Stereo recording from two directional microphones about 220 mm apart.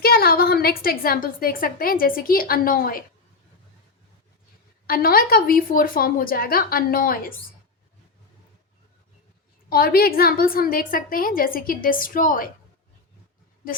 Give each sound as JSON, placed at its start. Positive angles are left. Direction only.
{"t": 0.0, "sound": "a woman's voice", "side_deg": 45}
{"t": 4.9, "sound": "a woman's voice", "side_deg": 40}
{"t": 9.6, "sound": "a woman's voice", "side_deg": 40}